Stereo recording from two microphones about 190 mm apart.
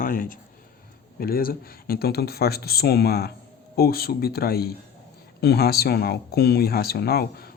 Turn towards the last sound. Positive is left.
turn(degrees=55)  # may be behind; listen again after turning